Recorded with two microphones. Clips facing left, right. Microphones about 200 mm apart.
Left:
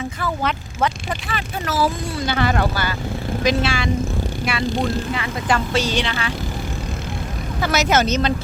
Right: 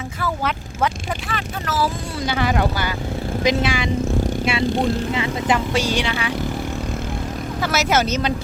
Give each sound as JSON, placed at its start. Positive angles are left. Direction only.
{"t": 0.2, "sound": "speech", "side_deg": -5}
{"t": 1.3, "sound": "speech", "side_deg": 10}
{"t": 2.2, "sound": "speech", "side_deg": -10}
{"t": 7.6, "sound": "speech", "side_deg": -5}